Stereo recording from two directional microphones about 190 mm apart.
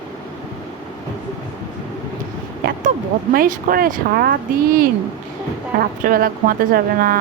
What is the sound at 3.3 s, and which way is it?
Speech, 50° right (ahead or behind).